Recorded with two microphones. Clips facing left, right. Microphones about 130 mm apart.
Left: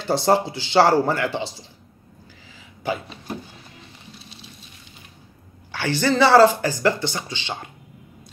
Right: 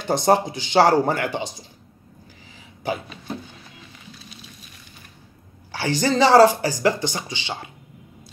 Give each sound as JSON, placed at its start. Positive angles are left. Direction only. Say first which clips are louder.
{"t": 0.0, "sound": "speech", "louder": "right 1 dB", "side_deg": -15}
{"t": 5.8, "sound": "speech", "louder": "even", "side_deg": -15}